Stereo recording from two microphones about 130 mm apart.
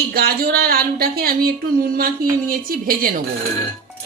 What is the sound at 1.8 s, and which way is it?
A woman's voice, 90° right.